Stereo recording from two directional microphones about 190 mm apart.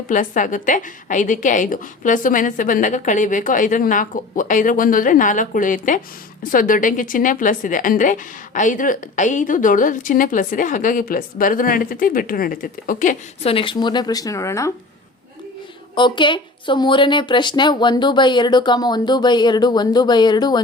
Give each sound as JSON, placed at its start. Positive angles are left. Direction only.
{"t": 0.1, "sound": "a woman's voice", "side_deg": 45}
{"t": 16.0, "sound": "a woman's voice", "side_deg": 25}